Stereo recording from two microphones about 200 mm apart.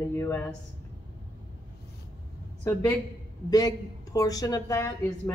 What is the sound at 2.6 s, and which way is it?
A woman's voice, 15° left (ahead or behind).